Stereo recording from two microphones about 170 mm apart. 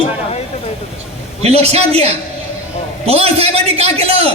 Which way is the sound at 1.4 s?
35° right (ahead or behind).